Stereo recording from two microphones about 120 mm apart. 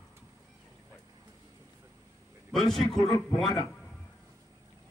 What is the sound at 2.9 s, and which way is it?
Speech, 35° left (ahead or behind).